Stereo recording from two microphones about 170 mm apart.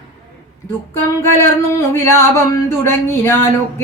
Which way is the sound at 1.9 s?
15° left (ahead or behind).